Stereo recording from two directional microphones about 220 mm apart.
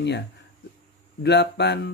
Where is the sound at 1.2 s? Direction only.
50° left (ahead or behind).